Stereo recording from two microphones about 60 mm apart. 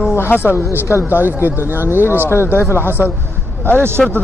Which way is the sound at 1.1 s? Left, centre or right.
Right.